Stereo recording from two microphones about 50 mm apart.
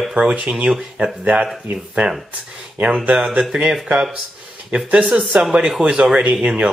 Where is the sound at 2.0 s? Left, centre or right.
Right.